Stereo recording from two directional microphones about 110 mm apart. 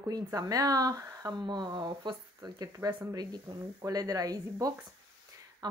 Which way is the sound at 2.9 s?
25° right (ahead or behind).